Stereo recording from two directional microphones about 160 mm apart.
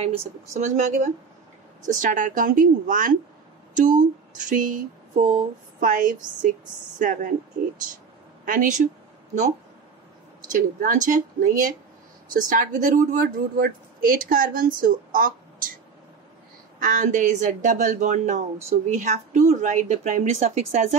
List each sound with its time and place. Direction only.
0.0 s speech: 40° right (ahead or behind)
4.5 s a sound: 55° right (ahead or behind)
5.8 s speech: 55° right (ahead or behind)
8.5 s speech: 55° right (ahead or behind)
10.5 s speech: 50° right (ahead or behind)
16.8 s speech: 55° right (ahead or behind)